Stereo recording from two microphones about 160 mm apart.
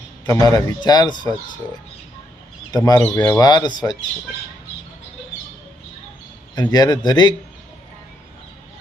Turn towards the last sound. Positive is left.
turn(degrees=25)  # may be behind; listen again after turning